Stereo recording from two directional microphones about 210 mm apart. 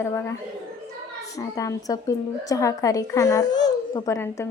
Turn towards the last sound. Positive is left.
turn(degrees=15)  # may be behind; listen again after turning